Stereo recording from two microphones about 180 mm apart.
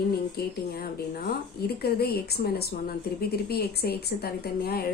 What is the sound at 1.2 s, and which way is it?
A woman's voice, 60° left (ahead or behind).